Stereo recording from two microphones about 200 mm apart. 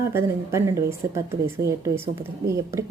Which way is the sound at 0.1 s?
15° right (ahead or behind).